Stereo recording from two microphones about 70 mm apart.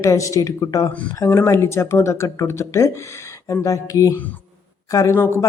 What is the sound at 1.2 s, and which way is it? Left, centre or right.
A man's voice, left.